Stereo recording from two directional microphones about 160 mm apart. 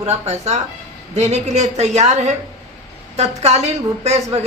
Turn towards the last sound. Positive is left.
turn(degrees=-40)  # may be behind; listen again after turning